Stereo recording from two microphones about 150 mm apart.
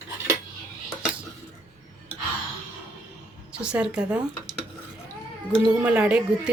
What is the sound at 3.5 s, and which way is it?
Speech, 5° right (ahead or behind).